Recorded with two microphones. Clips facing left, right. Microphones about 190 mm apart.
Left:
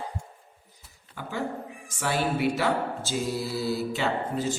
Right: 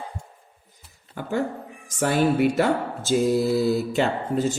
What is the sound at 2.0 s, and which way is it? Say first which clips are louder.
A man's voice: right 7 dB; 50° right (ahead or behind).